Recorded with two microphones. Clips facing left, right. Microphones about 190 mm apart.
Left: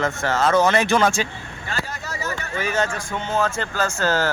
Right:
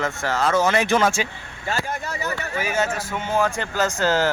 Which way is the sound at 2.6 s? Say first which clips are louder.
Left 1 dB; 10° right (ahead or behind).